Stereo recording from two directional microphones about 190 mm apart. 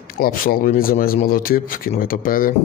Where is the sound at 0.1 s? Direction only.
50° left (ahead or behind).